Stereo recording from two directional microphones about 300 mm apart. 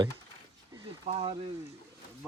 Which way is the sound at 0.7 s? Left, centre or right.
Centre.